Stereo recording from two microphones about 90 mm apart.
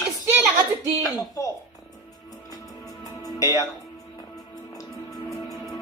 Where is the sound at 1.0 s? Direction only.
40° left (ahead or behind).